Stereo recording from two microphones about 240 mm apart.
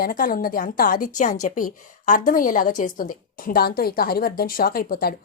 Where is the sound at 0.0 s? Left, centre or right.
Left.